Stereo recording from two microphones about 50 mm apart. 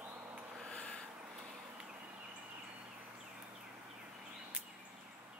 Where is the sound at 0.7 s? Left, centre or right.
Left.